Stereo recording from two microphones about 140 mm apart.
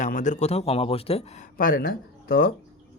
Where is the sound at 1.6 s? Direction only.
90° left.